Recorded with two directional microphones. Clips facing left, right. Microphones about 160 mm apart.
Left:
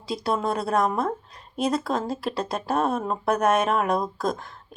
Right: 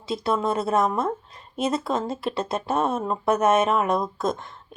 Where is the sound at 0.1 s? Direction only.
Centre (ahead or behind).